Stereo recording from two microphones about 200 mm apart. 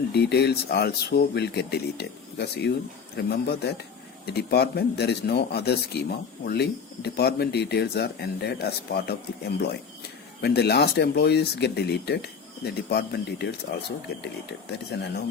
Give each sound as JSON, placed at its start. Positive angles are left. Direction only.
{"t": 0.1, "sound": "speech", "side_deg": 55}
{"t": 14.8, "sound": "speech", "side_deg": 55}